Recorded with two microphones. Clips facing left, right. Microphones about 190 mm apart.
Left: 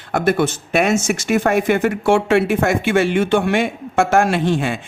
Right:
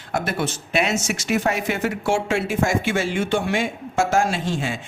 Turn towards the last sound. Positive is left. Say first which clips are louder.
# left 7 dB
turn(degrees=60)  # may be behind; listen again after turning